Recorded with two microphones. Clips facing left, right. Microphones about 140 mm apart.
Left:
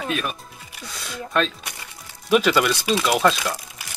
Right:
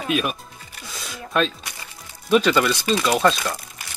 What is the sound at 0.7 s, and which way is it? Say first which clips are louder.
Speech: left 2 dB; centre (ahead or behind).